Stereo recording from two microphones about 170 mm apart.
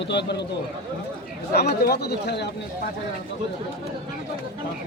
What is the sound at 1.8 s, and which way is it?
Speech, 70° left (ahead or behind).